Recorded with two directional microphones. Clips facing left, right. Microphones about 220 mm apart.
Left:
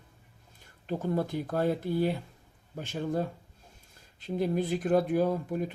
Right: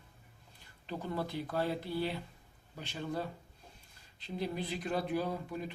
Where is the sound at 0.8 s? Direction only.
45° left (ahead or behind).